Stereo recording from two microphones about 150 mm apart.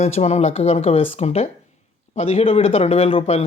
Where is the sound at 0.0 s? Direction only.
45° left (ahead or behind).